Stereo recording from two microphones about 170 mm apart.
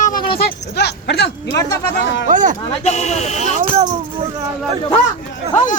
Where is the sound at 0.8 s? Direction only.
75° left (ahead or behind).